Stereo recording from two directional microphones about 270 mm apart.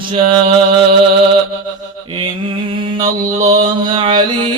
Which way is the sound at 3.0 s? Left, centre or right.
Centre.